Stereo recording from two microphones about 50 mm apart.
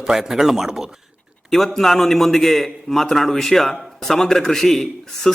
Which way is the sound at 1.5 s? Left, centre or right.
Centre.